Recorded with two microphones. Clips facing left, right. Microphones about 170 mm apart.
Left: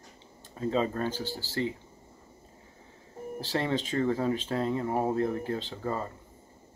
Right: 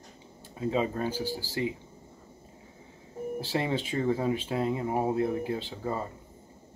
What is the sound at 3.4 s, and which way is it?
Speech, 10° right (ahead or behind).